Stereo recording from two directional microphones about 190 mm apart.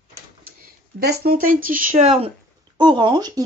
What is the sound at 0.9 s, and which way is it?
Speech, 55° right (ahead or behind).